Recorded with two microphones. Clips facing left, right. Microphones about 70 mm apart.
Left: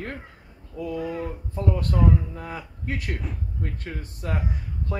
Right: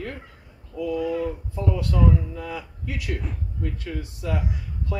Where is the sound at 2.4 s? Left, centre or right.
Left.